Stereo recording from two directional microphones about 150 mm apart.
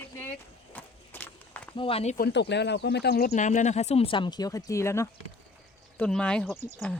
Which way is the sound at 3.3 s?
55° left (ahead or behind).